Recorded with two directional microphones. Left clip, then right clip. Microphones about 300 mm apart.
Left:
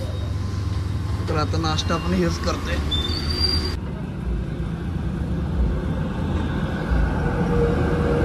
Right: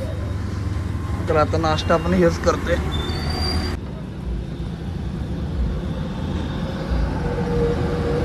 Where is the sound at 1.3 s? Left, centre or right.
Centre.